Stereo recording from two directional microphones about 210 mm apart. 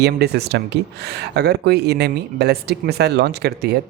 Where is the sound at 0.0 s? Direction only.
50° right (ahead or behind).